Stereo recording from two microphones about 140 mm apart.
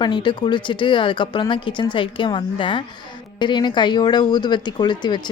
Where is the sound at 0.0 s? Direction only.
35° left (ahead or behind).